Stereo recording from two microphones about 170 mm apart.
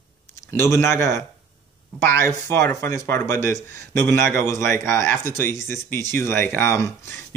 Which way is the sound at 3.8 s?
80° right.